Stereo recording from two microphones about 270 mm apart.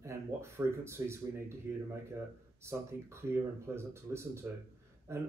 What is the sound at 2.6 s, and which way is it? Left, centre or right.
Speech, centre.